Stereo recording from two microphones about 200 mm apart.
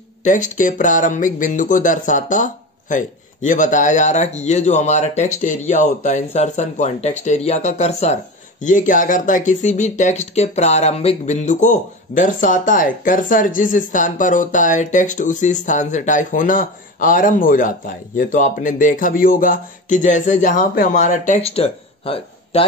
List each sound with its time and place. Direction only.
0.2 s speech: 40° left (ahead or behind)